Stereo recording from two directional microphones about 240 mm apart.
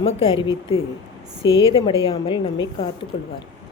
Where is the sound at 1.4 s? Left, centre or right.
Left.